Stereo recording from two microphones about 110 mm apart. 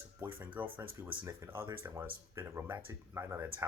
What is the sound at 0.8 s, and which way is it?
Speech, 20° right (ahead or behind).